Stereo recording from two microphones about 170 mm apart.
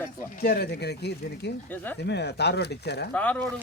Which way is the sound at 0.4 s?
70° left (ahead or behind).